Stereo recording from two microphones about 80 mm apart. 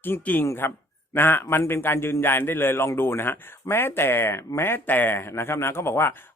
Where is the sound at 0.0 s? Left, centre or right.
Left.